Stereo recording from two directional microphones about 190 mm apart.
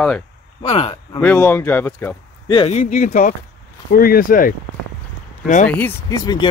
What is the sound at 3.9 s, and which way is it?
Speech, 50° left (ahead or behind).